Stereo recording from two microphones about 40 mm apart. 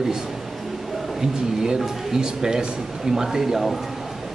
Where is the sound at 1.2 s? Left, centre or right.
Centre.